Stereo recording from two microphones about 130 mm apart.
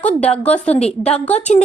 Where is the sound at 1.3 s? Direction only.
65° left (ahead or behind).